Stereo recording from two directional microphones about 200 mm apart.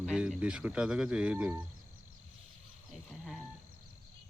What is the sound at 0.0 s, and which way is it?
Speech, 5° right (ahead or behind).